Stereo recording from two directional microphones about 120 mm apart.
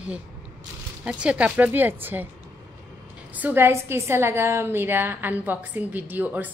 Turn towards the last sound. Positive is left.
turn(degrees=-15)  # may be behind; listen again after turning